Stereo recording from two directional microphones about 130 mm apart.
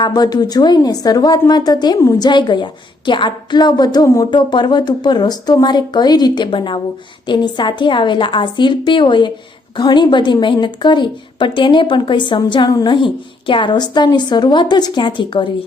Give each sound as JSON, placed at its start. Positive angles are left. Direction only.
{"t": 0.0, "sound": "speech", "side_deg": 30}